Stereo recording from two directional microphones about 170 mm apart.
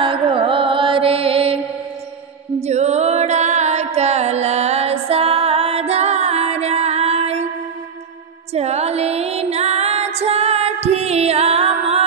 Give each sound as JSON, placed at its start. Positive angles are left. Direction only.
{"t": 0.0, "sound": "mantra", "side_deg": -30}
{"t": 2.6, "sound": "music", "side_deg": -40}
{"t": 8.5, "sound": "music", "side_deg": -40}